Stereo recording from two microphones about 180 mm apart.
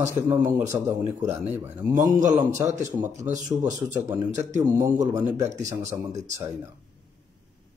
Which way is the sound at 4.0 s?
25° right (ahead or behind).